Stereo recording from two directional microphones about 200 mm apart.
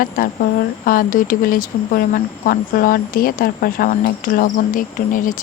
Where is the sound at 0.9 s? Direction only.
45° left (ahead or behind).